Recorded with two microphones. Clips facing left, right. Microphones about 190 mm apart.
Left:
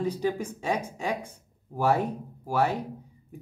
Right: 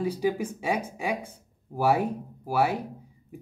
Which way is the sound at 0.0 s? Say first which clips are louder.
Right 1 dB; 10° right (ahead or behind).